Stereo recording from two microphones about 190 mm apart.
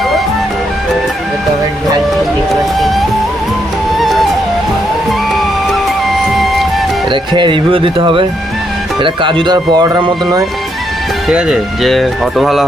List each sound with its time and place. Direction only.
3.9 s music: centre (ahead or behind)
6.3 s music: centre (ahead or behind)
7.1 s speech: 25° right (ahead or behind)
11.3 s speech: 5° right (ahead or behind)